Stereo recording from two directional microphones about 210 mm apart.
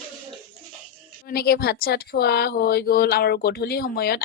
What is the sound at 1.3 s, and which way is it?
Speech, 45° left (ahead or behind).